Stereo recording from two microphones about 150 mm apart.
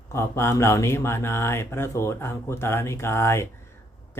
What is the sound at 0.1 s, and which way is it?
Speech, 15° left (ahead or behind).